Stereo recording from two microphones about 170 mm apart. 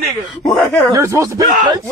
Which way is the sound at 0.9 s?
15° right (ahead or behind).